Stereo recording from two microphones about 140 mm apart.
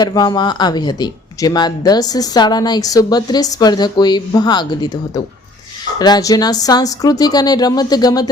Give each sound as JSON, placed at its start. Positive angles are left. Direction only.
{"t": 0.0, "sound": "speech", "side_deg": 30}